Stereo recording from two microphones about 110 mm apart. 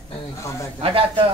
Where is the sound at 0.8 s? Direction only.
55° right (ahead or behind).